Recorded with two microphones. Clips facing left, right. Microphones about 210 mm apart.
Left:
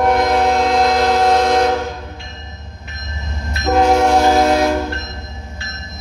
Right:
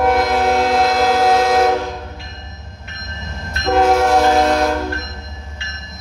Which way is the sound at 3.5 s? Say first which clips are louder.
Even; centre (ahead or behind).